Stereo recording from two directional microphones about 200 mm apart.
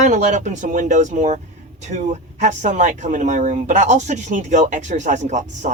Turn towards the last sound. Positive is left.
turn(degrees=-35)  # may be behind; listen again after turning